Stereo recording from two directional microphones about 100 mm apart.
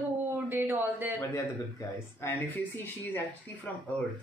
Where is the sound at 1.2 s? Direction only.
25° left (ahead or behind).